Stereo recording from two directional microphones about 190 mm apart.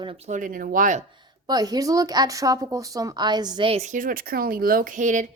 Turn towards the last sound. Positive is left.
turn(degrees=-40)  # may be behind; listen again after turning